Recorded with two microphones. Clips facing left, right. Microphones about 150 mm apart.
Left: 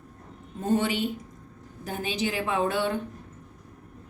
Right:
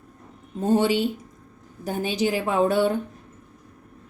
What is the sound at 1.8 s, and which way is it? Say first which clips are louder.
A woman's voice: right 5 dB; 40° right (ahead or behind).